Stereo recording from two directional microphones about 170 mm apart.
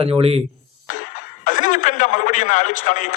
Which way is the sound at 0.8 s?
50° left (ahead or behind).